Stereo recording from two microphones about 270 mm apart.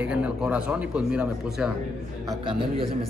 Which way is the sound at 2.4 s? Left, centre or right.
Centre.